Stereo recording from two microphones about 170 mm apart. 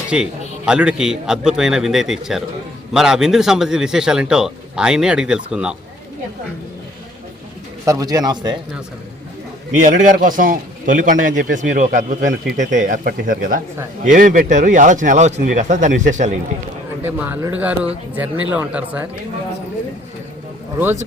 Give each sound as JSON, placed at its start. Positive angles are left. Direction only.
{"t": 0.1, "sound": "a man's voice", "side_deg": -5}
{"t": 7.9, "sound": "speech", "side_deg": -20}
{"t": 9.8, "sound": "speech", "side_deg": -50}
{"t": 17.0, "sound": "speech", "side_deg": -10}
{"t": 20.7, "sound": "speech", "side_deg": -10}